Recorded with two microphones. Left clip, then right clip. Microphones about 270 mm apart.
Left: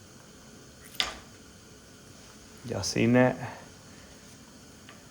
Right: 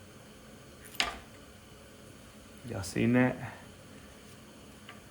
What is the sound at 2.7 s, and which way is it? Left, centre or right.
Speech, left.